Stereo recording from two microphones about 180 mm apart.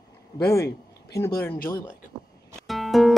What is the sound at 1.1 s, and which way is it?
Speech, 15° left (ahead or behind).